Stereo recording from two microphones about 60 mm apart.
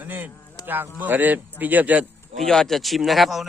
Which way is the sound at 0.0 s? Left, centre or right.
Right.